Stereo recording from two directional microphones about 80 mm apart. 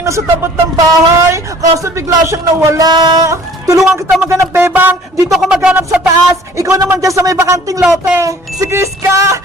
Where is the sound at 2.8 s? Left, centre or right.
Right.